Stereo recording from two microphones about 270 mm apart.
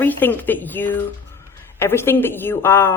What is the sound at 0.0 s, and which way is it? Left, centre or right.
A woman's voice, centre.